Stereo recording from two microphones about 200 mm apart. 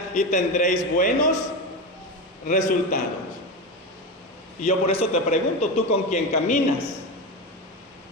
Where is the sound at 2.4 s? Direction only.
40° left (ahead or behind).